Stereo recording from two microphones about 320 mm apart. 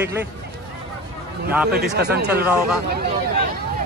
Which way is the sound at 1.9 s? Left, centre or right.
Right.